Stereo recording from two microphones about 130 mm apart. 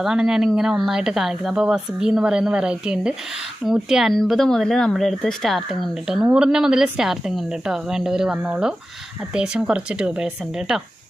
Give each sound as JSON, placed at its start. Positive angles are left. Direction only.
{"t": 0.0, "sound": "a woman's voice", "side_deg": -5}